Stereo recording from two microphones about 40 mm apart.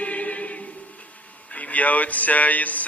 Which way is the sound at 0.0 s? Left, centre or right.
Left.